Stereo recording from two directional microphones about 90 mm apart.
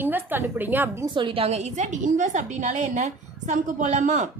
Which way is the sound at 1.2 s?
80° right.